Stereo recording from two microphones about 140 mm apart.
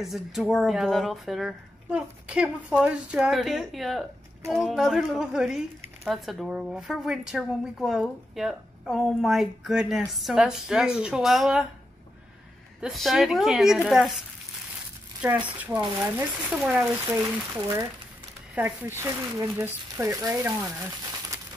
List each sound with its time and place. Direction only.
0.0 s a woman's voice: centre (ahead or behind)
12.8 s a woman's voice: centre (ahead or behind)
15.4 s a woman's voice: 10° right (ahead or behind)
16.8 s speech: 15° right (ahead or behind)
18.5 s speech: 15° right (ahead or behind)